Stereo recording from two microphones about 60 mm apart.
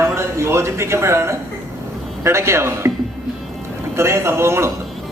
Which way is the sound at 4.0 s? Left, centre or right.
Right.